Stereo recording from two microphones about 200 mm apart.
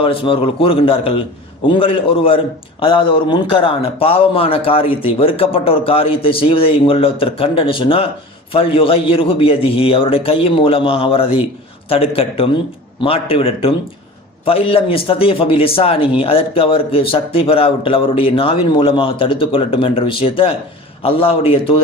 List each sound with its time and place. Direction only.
0.0 s a man's voice: 25° left (ahead or behind)